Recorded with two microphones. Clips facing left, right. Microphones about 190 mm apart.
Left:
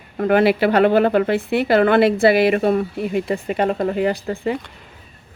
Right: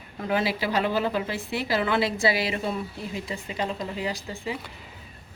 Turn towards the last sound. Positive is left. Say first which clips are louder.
# left 10 dB
turn(degrees=60)  # may be behind; listen again after turning